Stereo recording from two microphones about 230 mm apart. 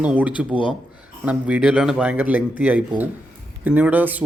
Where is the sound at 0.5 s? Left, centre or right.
Left.